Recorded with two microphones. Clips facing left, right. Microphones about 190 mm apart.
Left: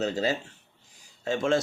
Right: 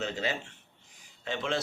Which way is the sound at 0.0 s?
40° left (ahead or behind).